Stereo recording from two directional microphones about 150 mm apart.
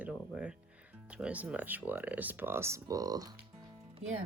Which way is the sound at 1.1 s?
10° right (ahead or behind).